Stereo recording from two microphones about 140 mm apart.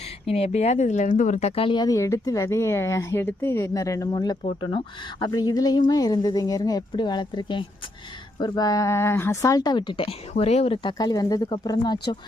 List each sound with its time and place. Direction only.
0.3 s speech: 45° left (ahead or behind)
10.8 s speech: 30° left (ahead or behind)